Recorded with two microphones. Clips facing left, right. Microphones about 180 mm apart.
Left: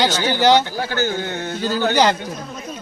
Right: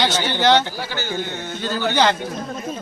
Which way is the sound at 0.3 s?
10° left (ahead or behind).